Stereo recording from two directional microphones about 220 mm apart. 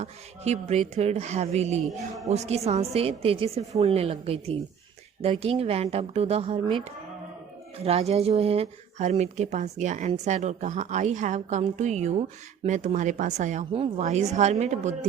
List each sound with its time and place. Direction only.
0.0 s a woman's voice: 30° right (ahead or behind)
7.9 s a woman's voice: 25° right (ahead or behind)